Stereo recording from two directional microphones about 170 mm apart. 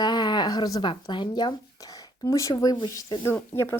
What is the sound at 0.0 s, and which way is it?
Speech, 25° left (ahead or behind).